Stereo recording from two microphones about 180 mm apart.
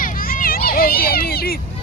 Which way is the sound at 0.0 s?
50° left (ahead or behind).